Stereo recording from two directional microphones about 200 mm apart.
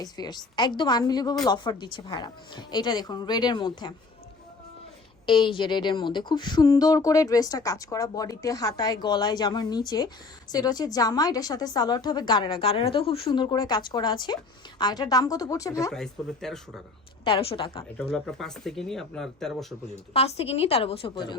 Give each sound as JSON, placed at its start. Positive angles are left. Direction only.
{"t": 0.0, "sound": "a woman's voice", "side_deg": 20}
{"t": 5.2, "sound": "a woman's voice", "side_deg": 25}
{"t": 15.9, "sound": "speech", "side_deg": 0}
{"t": 17.2, "sound": "a woman's voice", "side_deg": 25}
{"t": 17.9, "sound": "speech", "side_deg": 5}
{"t": 20.1, "sound": "a woman's voice", "side_deg": 30}